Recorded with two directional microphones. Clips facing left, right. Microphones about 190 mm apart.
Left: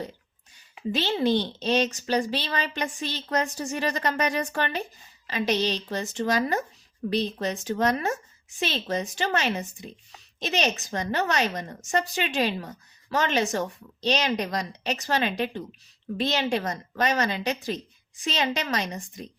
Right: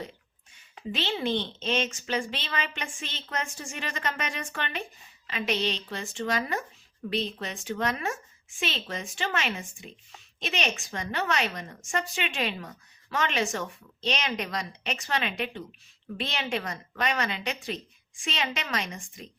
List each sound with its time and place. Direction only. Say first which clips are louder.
0.9 s a woman's voice: left 5 dB; 40° left (ahead or behind)